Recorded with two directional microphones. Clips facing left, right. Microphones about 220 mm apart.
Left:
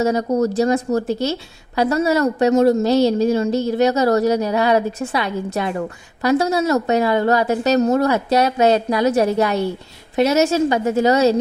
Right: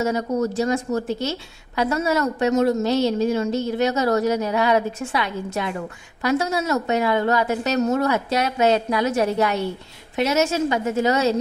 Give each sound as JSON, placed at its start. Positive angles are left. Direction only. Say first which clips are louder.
{"t": 0.0, "sound": "a woman's voice", "louder": "left 4 dB", "side_deg": 35}